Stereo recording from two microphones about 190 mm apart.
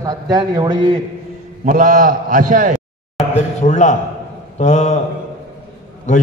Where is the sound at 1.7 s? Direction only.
45° right (ahead or behind).